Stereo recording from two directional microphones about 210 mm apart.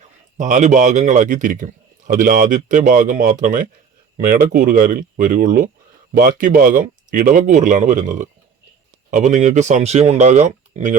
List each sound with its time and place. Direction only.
0.3 s a man's voice: 35° right (ahead or behind)